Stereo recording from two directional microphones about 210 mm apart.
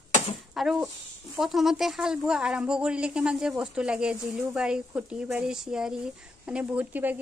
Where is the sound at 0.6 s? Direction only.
Centre (ahead or behind).